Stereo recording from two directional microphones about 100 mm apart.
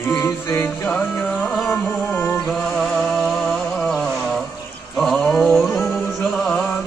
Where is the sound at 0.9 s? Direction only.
15° left (ahead or behind).